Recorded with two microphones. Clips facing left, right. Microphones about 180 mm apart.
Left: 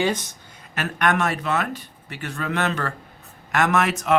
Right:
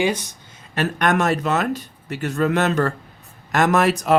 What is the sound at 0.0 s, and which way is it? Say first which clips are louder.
Speech: right 2 dB; 10° right (ahead or behind).